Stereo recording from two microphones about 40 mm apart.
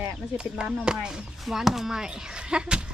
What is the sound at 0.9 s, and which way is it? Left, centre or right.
Speech, centre.